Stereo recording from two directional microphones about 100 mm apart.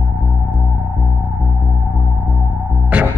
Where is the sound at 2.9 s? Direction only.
15° right (ahead or behind).